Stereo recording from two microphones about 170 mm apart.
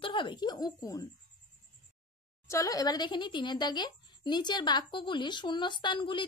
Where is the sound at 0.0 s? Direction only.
30° left (ahead or behind).